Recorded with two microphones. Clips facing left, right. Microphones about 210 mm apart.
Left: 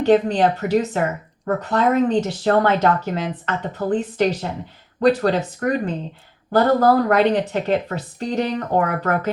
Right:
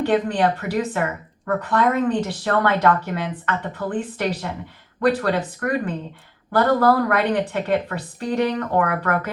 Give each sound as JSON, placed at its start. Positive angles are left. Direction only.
{"t": 0.0, "sound": "a woman's voice", "side_deg": 25}